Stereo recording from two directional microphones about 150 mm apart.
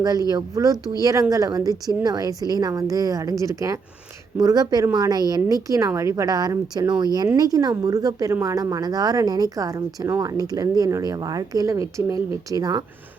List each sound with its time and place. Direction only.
0.3 s a woman's voice: 25° right (ahead or behind)